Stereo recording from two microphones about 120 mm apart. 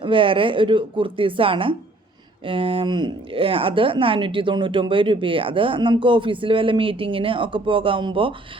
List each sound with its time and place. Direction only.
0.0 s speech: 45° right (ahead or behind)